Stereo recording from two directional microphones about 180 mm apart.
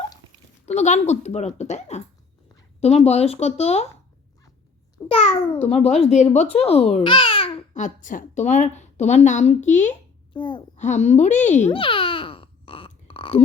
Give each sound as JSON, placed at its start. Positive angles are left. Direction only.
{"t": 0.6, "sound": "a woman's voice", "side_deg": 40}
{"t": 5.0, "sound": "a woman's voice", "side_deg": 35}
{"t": 7.7, "sound": "a woman's voice", "side_deg": 45}
{"t": 10.3, "sound": "a child's voice", "side_deg": 25}
{"t": 10.8, "sound": "babbling", "side_deg": 40}